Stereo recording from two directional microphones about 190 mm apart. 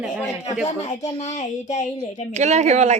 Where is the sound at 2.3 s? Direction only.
35° right (ahead or behind).